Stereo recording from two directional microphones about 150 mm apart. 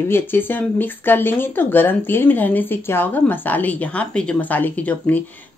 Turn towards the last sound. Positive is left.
turn(degrees=10)  # may be behind; listen again after turning